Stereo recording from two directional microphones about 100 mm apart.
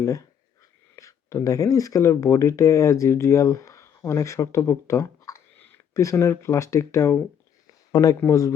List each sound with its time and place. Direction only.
0.0 s speech: 35° left (ahead or behind)
5.5 s a sound: 20° left (ahead or behind)
5.9 s speech: 30° left (ahead or behind)
8.3 s speech: 35° left (ahead or behind)